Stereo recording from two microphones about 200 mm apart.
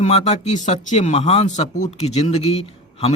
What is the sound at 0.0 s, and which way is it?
A man's voice, 35° left (ahead or behind).